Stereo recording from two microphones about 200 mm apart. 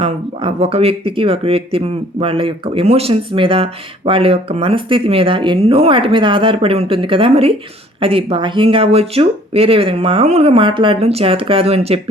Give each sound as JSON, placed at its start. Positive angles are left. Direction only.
{"t": 0.0, "sound": "speech", "side_deg": -30}